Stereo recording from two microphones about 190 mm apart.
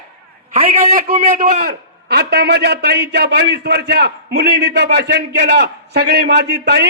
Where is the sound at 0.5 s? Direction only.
35° right (ahead or behind).